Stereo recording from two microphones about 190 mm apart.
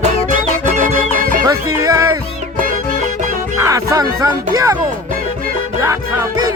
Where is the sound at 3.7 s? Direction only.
15° right (ahead or behind).